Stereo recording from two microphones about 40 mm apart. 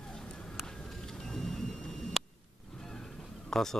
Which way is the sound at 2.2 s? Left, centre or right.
Centre.